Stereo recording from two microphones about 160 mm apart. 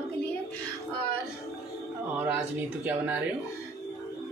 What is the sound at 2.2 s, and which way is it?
Speech, 10° right (ahead or behind).